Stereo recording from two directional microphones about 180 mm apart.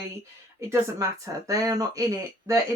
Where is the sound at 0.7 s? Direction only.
20° right (ahead or behind).